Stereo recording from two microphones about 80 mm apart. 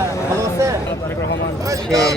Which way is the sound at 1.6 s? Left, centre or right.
Right.